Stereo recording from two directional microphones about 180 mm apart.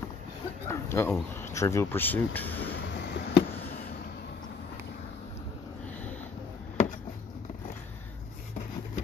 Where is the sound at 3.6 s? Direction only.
50° left (ahead or behind).